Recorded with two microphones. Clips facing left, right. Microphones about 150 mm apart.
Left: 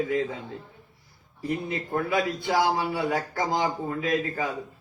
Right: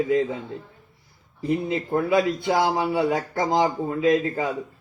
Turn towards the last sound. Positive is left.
turn(degrees=-25)  # may be behind; listen again after turning